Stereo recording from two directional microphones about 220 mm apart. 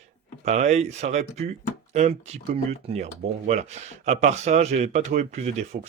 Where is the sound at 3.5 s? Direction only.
30° right (ahead or behind).